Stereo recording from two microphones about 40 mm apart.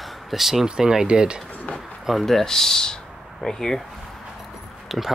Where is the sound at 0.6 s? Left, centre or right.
Centre.